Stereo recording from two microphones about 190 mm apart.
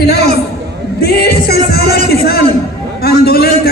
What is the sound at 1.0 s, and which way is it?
Music, 55° left (ahead or behind).